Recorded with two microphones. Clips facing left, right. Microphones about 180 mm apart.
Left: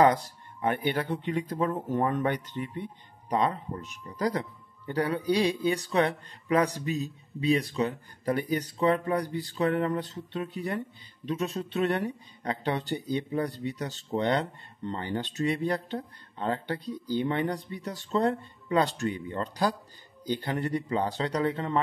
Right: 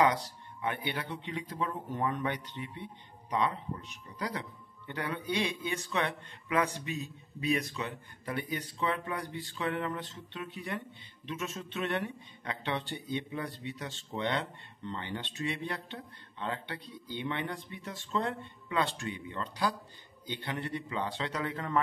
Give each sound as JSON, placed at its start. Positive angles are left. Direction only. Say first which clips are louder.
{"t": 0.0, "sound": "speech", "louder": "left 5 dB", "side_deg": 45}